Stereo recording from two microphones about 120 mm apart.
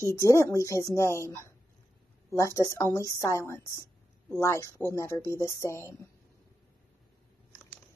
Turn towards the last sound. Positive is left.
turn(degrees=20)  # may be behind; listen again after turning